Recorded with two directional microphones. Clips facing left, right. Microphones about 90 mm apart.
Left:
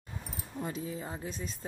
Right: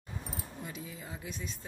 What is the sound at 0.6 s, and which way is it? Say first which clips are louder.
Speech: left 6 dB; 35° left (ahead or behind).